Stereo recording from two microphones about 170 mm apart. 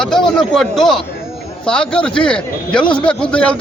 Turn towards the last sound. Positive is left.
turn(degrees=5)  # may be behind; listen again after turning